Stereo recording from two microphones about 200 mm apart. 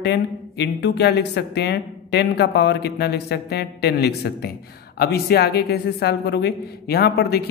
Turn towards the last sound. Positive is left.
turn(degrees=55)  # may be behind; listen again after turning